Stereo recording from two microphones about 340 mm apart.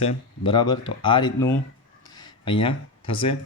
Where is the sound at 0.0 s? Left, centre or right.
Centre.